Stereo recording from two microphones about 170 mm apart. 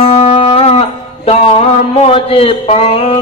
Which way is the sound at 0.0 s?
35° left (ahead or behind).